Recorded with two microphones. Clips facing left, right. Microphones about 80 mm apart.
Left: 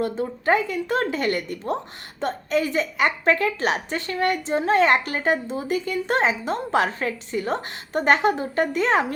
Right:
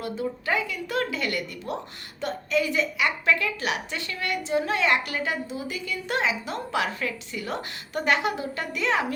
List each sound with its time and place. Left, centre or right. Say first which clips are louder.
0.0 s a woman's voice: left 6 dB; left